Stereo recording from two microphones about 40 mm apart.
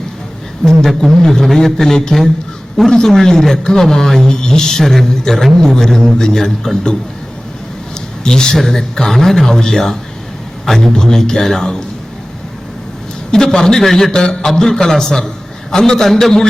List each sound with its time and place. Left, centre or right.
0.6 s a man's voice: centre
8.2 s a man's voice: centre
8.5 s a man's voice: centre
13.3 s a man's voice: centre